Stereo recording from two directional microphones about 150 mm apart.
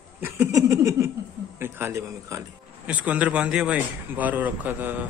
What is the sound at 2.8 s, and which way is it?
A man's voice, 10° right (ahead or behind).